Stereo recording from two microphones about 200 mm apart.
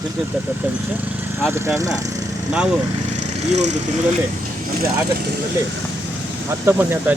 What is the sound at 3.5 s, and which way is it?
Speech, 35° right (ahead or behind).